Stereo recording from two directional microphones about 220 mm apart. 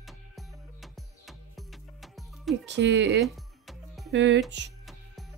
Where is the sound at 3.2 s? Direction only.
Centre (ahead or behind).